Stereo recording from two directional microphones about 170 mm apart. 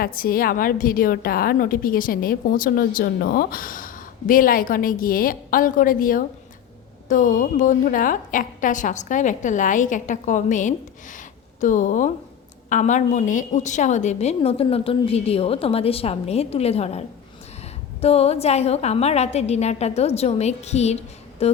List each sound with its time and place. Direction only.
0.0 s a woman's voice: 60° left (ahead or behind); by 21.5 s 40° left (ahead or behind)